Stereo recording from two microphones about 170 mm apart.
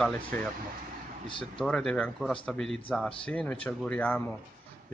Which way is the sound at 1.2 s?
30° left (ahead or behind).